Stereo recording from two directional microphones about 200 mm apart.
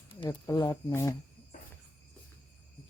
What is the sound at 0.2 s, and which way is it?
Speech, 15° left (ahead or behind).